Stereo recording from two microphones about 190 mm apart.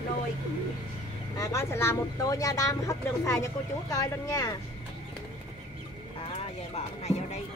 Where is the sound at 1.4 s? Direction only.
15° left (ahead or behind).